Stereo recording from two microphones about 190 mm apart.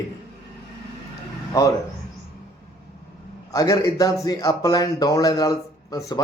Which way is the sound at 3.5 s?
20° left (ahead or behind).